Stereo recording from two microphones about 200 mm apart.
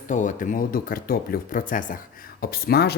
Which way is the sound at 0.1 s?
40° left (ahead or behind).